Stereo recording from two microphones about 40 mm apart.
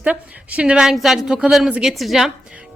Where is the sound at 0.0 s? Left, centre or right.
Right.